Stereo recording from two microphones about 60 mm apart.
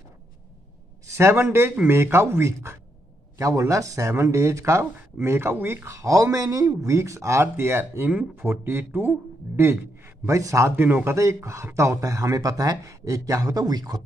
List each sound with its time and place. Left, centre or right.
1.0 s speech: right
3.3 s speech: right
4.1 s speech: right
5.9 s speech: right
8.1 s a man's voice: right
10.2 s speech: right
10.8 s speech: right
11.1 s speech: right
12.0 s speech: right